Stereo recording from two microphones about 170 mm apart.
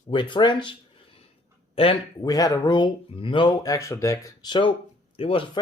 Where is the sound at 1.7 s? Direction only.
35° left (ahead or behind).